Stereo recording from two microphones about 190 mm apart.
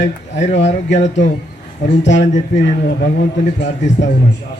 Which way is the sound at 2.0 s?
70° left (ahead or behind).